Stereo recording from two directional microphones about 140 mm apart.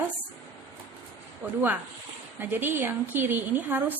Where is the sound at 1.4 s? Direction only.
15° right (ahead or behind).